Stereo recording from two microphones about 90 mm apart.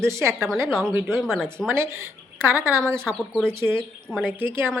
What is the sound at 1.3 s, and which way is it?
Speech, 5° left (ahead or behind).